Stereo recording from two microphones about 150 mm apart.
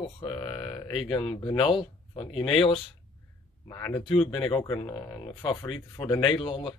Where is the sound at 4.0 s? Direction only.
35° left (ahead or behind).